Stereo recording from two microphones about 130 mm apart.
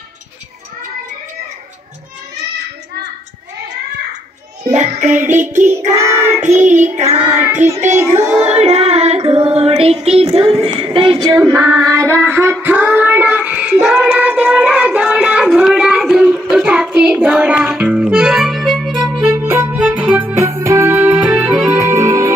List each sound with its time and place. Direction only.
4.6 s child singing: 65° right (ahead or behind)
5.3 s child singing: 75° right (ahead or behind)
5.9 s music: 20° right (ahead or behind)
6.6 s child singing: 70° right (ahead or behind)
7.9 s music: 20° right (ahead or behind)
8.4 s female singing: 55° right (ahead or behind)
10.5 s child singing: 45° right (ahead or behind); by 19.2 s 5° right (ahead or behind)
19.2 s music: 15° right (ahead or behind)
21.7 s music: 20° right (ahead or behind)